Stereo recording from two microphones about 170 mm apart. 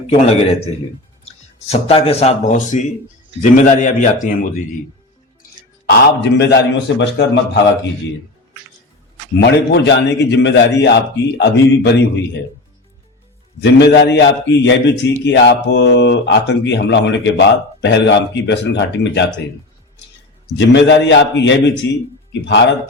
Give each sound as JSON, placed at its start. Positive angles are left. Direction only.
{"t": 0.1, "sound": "a man's voice", "side_deg": 35}
{"t": 1.7, "sound": "a man's voice", "side_deg": 35}
{"t": 5.8, "sound": "a man's voice", "side_deg": 90}
{"t": 9.4, "sound": "a man's voice", "side_deg": 90}
{"t": 13.6, "sound": "a man's voice", "side_deg": 85}
{"t": 20.6, "sound": "a man's voice", "side_deg": 90}